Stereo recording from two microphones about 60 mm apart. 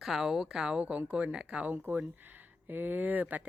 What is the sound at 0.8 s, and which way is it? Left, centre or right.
Speech, right.